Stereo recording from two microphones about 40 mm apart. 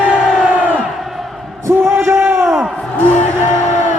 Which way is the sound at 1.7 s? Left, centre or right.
Right.